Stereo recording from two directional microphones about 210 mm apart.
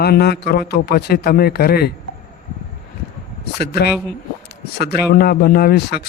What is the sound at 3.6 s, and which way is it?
Speech, 50° left (ahead or behind).